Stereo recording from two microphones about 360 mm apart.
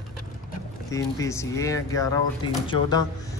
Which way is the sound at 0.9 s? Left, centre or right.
Centre.